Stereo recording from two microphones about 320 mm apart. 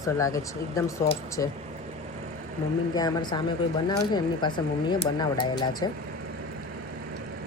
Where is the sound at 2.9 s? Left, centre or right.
Centre.